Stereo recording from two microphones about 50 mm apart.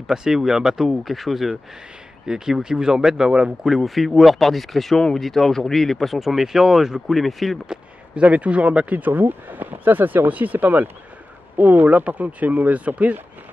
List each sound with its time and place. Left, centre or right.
0.1 s speech: centre
2.2 s speech: centre
3.6 s speech: centre
7.6 s a sound: centre
8.2 s speech: right
8.9 s speech: right